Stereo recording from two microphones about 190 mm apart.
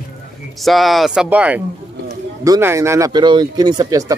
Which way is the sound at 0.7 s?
Centre (ahead or behind).